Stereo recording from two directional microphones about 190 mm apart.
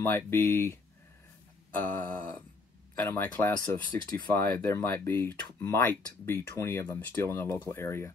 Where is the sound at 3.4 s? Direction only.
10° left (ahead or behind).